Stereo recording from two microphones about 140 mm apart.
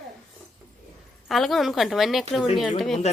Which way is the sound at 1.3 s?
Centre (ahead or behind).